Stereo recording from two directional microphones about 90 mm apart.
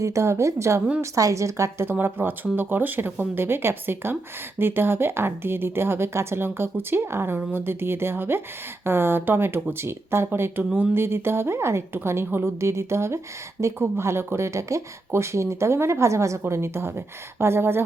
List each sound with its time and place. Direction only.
0.0 s speech: 35° right (ahead or behind)